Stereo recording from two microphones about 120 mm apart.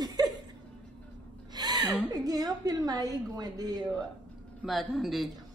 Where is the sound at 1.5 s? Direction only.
35° right (ahead or behind).